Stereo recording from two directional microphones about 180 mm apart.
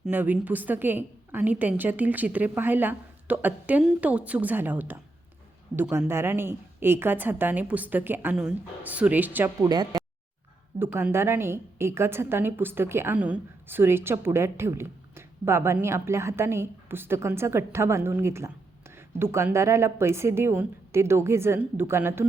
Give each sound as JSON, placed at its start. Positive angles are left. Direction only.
{"t": 0.0, "sound": "a woman's voice", "side_deg": -10}
{"t": 9.6, "sound": "speech", "side_deg": -20}
{"t": 10.8, "sound": "a woman's voice", "side_deg": -10}